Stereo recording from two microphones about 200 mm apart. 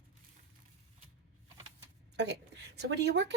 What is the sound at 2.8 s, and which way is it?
Speech, 60° right (ahead or behind).